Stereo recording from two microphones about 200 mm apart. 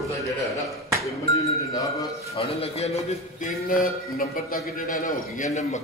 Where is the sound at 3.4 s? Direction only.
45° left (ahead or behind).